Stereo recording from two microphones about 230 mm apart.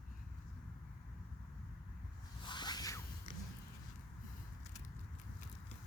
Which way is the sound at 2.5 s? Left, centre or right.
Centre.